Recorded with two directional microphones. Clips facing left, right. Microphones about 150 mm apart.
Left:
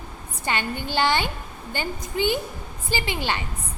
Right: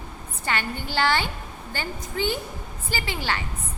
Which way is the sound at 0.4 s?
20° left (ahead or behind).